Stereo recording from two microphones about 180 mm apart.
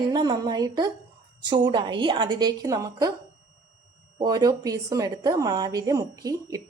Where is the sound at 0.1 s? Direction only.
20° right (ahead or behind).